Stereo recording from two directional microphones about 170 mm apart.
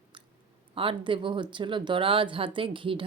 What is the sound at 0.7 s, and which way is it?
Speech, 30° right (ahead or behind).